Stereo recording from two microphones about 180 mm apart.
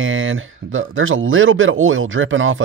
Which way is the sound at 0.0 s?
90° right.